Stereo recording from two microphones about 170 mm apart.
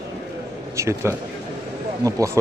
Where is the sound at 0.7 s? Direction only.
15° right (ahead or behind).